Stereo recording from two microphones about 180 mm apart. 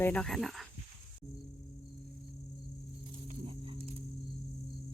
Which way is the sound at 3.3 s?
30° right (ahead or behind).